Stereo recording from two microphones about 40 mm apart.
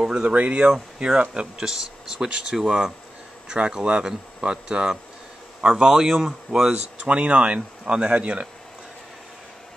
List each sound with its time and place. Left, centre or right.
0.0 s a sound: right
0.4 s speech: right
0.9 s speech: centre
2.6 s speech: right; by 6.8 s centre
7.1 s speech: right